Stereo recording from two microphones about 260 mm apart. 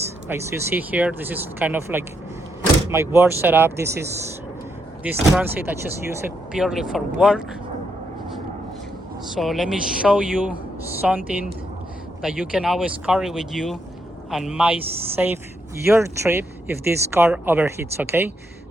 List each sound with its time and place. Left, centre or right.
0.3 s speech: centre
9.2 s speech: centre
12.2 s speech: centre